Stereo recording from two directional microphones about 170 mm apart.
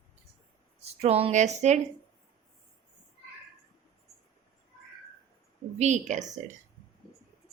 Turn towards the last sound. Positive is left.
turn(degrees=-45)  # may be behind; listen again after turning